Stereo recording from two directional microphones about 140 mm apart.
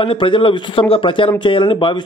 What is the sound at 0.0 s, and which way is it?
A man's voice, 40° left (ahead or behind).